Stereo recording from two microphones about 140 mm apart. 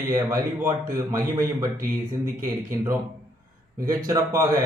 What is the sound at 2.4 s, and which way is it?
A man's voice, 20° right (ahead or behind).